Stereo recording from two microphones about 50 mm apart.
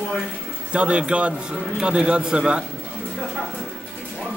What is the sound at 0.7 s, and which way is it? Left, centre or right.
A man's voice, right.